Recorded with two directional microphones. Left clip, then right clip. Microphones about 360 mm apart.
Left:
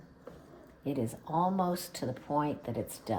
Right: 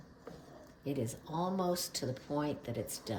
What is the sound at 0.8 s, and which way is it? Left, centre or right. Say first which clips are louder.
Speech: left 3 dB; centre.